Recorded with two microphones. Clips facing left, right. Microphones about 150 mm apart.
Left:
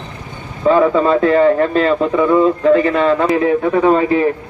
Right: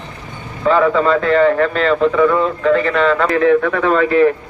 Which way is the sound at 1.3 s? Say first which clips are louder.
Left 1 dB; 20° left (ahead or behind).